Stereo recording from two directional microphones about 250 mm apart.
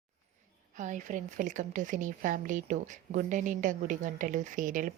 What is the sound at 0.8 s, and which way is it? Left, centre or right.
A woman's voice, right.